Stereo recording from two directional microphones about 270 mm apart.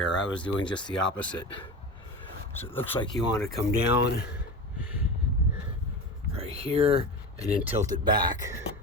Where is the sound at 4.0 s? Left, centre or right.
Left.